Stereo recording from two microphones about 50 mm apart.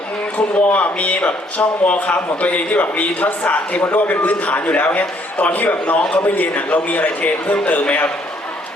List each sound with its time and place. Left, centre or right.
0.3 s a man's voice: left